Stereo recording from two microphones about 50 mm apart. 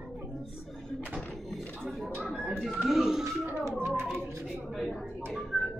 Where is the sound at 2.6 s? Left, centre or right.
Centre.